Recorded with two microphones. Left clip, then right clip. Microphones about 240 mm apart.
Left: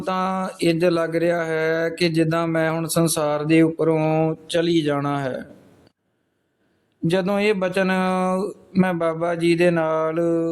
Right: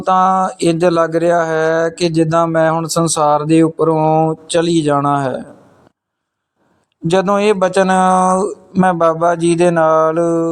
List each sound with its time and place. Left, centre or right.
0.0 s speech: centre
7.1 s speech: centre